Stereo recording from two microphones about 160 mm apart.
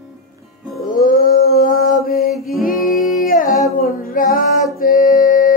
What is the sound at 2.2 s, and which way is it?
Music, centre (ahead or behind).